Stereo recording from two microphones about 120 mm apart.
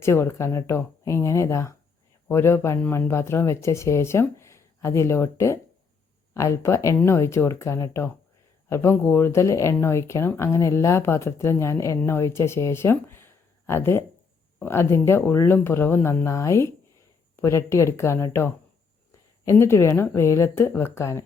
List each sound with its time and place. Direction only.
0.0 s speech: 20° left (ahead or behind)